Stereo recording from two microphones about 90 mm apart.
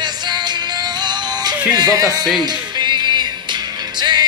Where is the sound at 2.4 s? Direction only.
55° right (ahead or behind).